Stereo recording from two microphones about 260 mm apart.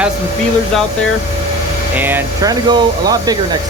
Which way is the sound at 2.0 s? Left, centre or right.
Centre.